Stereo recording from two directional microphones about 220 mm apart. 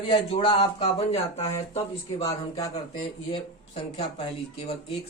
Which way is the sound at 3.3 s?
25° left (ahead or behind).